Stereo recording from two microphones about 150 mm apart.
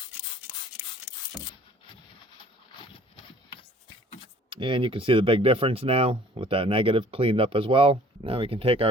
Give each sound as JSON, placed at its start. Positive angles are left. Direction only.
{"t": 4.4, "sound": "speech", "side_deg": -35}